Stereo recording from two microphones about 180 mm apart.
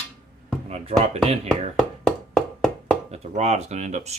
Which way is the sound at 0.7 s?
35° right (ahead or behind).